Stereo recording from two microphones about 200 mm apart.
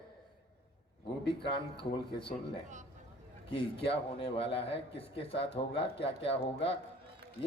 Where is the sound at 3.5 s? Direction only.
25° left (ahead or behind).